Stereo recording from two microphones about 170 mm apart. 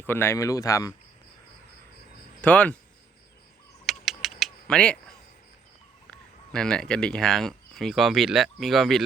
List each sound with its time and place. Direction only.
0.0 s speech: 15° left (ahead or behind)
2.4 s speech: 10° left (ahead or behind)
3.8 s a sound: centre (ahead or behind)
6.1 s speech: 5° left (ahead or behind)